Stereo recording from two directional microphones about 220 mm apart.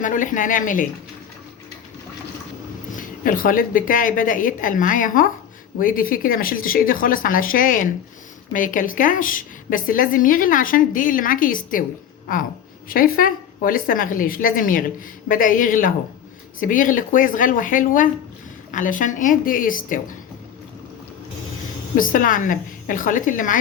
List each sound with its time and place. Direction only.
0.0 s a woman's voice: 35° left (ahead or behind)
2.9 s a woman's voice: 40° left (ahead or behind)
21.9 s a woman's voice: 40° left (ahead or behind)